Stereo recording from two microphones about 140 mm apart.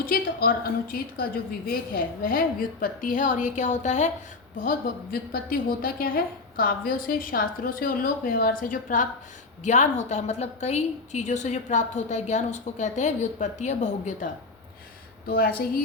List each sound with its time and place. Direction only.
0.0 s a woman's voice: 90° left
2.8 s a woman's voice: 75° left (ahead or behind); by 4.1 s 55° left (ahead or behind)
4.6 s a woman's voice: 90° left
9.6 s a woman's voice: 60° left (ahead or behind)
15.3 s a woman's voice: 90° left